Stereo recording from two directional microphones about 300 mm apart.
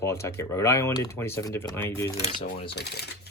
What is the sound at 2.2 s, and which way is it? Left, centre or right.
Speech, left.